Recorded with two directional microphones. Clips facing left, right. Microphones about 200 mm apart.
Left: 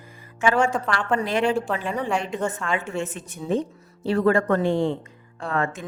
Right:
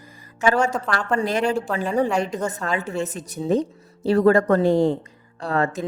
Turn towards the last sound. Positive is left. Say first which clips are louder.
# right 3 dB
turn(degrees=-35)  # may be behind; listen again after turning